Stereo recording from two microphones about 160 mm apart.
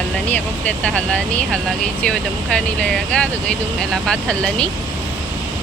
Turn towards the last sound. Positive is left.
turn(degrees=5)  # may be behind; listen again after turning